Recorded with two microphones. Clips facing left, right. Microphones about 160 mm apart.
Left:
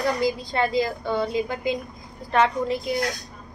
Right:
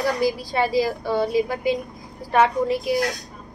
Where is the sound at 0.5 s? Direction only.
10° right (ahead or behind).